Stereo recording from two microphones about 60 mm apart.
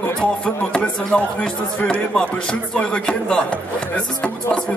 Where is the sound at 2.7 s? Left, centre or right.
Centre.